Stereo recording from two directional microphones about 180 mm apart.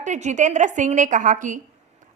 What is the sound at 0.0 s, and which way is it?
A woman's voice, 40° right (ahead or behind).